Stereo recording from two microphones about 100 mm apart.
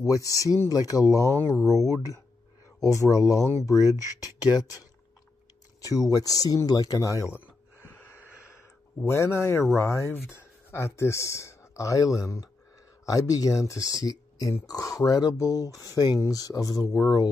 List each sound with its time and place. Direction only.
0.0 s speech: 35° left (ahead or behind)
4.5 s speech: 45° left (ahead or behind)
5.8 s speech: 35° left (ahead or behind)
7.8 s wheeze: 25° left (ahead or behind)
9.0 s speech: 30° left (ahead or behind)